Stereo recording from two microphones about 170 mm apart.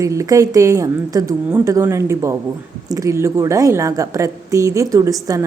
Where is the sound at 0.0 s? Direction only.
20° right (ahead or behind).